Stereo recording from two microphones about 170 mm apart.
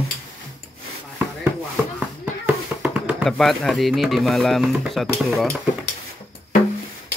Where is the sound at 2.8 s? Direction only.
5° right (ahead or behind).